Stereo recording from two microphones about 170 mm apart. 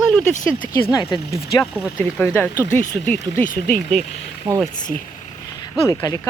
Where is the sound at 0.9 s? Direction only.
25° left (ahead or behind).